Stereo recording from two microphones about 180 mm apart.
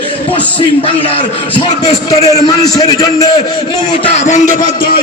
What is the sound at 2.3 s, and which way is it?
Speech, 20° left (ahead or behind).